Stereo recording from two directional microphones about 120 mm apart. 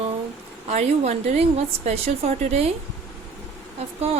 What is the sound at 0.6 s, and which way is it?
Speech, 65° right (ahead or behind).